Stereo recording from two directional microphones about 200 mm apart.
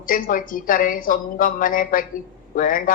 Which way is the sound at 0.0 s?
40° left (ahead or behind).